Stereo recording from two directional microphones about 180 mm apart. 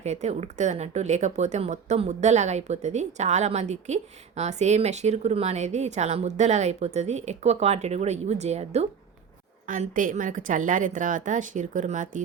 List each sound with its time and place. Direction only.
0.0 s a woman's voice: 40° right (ahead or behind)